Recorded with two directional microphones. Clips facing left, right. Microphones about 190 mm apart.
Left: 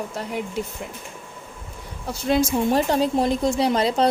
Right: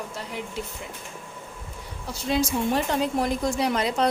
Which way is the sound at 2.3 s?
50° left (ahead or behind).